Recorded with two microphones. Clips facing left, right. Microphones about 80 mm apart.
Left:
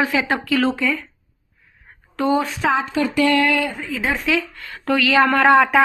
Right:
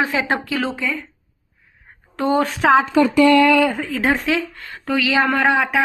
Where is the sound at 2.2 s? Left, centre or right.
Right.